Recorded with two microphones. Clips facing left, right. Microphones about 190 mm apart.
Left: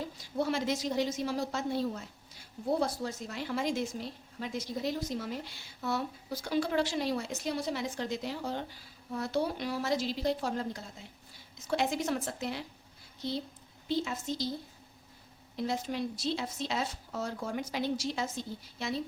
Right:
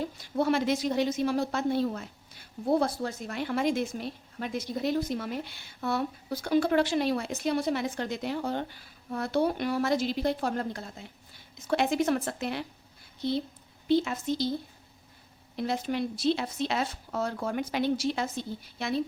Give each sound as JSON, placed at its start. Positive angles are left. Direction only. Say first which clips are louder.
{"t": 0.2, "sound": "a woman's voice", "louder": "right 5 dB", "side_deg": -60}
{"t": 13.8, "sound": "a woman's voice", "louder": "right 7 dB", "side_deg": -60}
{"t": 15.5, "sound": "a woman's voice", "louder": "right 3 dB", "side_deg": -65}